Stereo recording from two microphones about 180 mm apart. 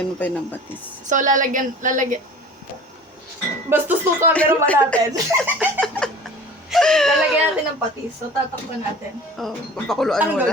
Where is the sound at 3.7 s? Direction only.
10° right (ahead or behind).